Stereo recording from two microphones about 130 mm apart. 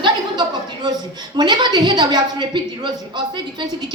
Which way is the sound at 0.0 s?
35° right (ahead or behind).